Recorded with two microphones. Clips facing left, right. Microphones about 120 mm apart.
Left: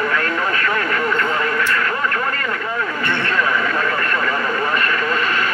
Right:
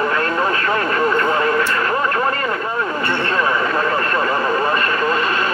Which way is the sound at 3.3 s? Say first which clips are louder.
Right 2 dB; 30° right (ahead or behind).